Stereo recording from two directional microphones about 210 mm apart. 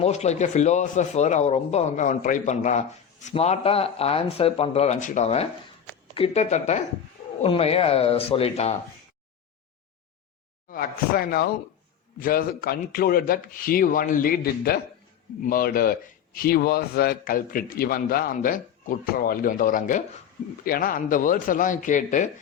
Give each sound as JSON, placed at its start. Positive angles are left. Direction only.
{"t": 0.0, "sound": "speech", "side_deg": 30}
{"t": 10.7, "sound": "speech", "side_deg": 45}